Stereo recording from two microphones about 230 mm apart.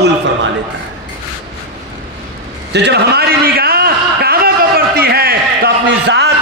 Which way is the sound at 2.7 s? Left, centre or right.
Right.